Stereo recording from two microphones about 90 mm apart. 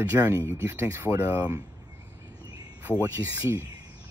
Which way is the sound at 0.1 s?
20° right (ahead or behind).